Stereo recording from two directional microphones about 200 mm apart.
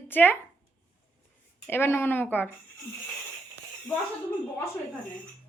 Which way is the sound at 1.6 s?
10° left (ahead or behind).